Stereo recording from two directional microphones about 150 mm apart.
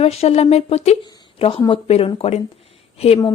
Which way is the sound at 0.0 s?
45° left (ahead or behind).